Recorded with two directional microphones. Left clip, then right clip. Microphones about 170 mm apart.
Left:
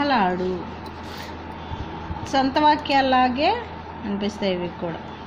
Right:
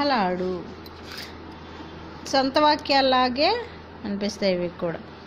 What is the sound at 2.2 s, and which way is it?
A woman's voice, 25° right (ahead or behind).